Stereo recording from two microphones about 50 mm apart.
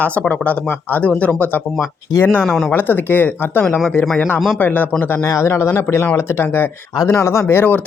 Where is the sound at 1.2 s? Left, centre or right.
Left.